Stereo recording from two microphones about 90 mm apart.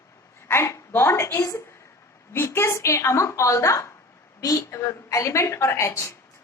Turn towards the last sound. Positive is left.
turn(degrees=35)  # may be behind; listen again after turning